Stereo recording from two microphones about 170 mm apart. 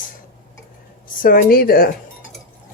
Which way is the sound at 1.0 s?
55° left (ahead or behind).